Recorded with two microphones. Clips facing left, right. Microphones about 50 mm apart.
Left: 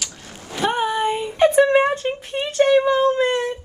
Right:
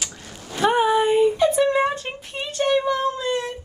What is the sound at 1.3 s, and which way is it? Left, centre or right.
Speech, left.